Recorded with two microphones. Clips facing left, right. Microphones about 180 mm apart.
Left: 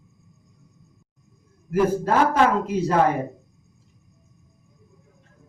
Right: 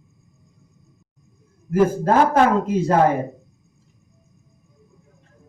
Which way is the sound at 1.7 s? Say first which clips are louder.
Right 3 dB; 50° right (ahead or behind).